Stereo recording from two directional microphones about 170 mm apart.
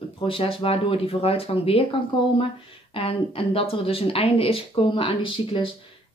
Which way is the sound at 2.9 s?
35° left (ahead or behind).